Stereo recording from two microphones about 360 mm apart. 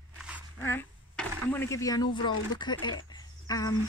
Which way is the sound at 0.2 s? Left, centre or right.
Centre.